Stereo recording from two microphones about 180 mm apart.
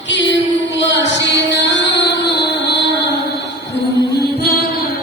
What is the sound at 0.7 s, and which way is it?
Music, 75° left (ahead or behind).